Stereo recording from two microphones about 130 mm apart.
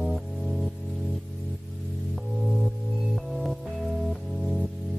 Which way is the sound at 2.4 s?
Centre (ahead or behind).